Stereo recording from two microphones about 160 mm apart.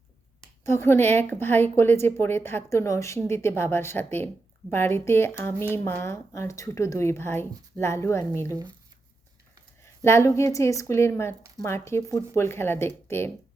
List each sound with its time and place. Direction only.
0.6 s a woman's voice: 15° left (ahead or behind)
9.8 s a woman's voice: 15° left (ahead or behind)